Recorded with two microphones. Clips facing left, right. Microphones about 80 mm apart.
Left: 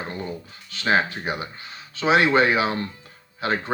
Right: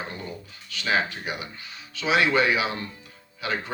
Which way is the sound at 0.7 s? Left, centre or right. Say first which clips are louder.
Left 4 dB; left.